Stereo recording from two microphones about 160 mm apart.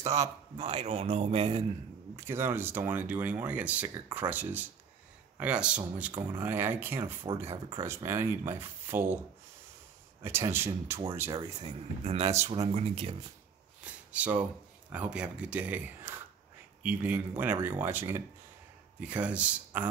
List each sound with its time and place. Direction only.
0.0 s speech: 20° right (ahead or behind)
0.6 s speech: 45° right (ahead or behind)
2.1 s speech: 15° right (ahead or behind)
10.2 s speech: 15° right (ahead or behind)
11.6 s speech: 40° right (ahead or behind)
14.1 s speech: 10° right (ahead or behind)